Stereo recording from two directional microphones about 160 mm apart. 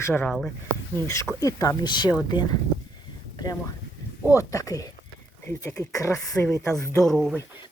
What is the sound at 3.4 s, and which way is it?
Speech, 25° left (ahead or behind).